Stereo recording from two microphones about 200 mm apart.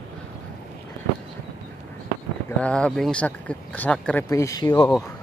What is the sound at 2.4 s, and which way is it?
Speech, 5° left (ahead or behind).